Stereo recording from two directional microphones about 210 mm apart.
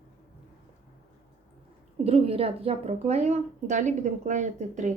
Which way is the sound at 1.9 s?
30° right (ahead or behind).